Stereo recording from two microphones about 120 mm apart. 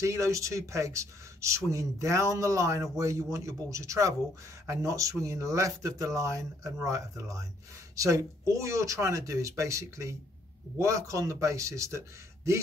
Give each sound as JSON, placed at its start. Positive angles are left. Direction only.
{"t": 0.0, "sound": "speech", "side_deg": -25}